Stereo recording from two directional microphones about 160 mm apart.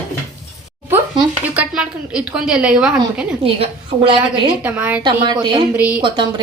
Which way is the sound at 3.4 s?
35° right (ahead or behind).